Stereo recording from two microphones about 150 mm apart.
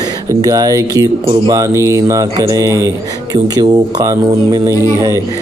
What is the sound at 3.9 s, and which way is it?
Speech, 25° right (ahead or behind).